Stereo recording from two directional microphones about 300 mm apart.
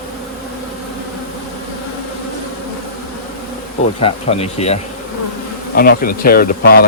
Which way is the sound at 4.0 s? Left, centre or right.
Centre.